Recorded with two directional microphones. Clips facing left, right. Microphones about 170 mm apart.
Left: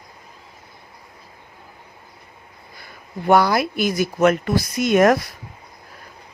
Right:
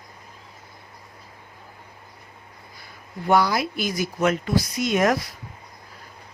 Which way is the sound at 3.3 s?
60° left (ahead or behind).